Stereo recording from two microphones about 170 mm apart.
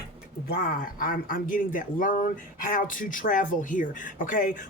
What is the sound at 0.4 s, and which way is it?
Speech, 60° left (ahead or behind).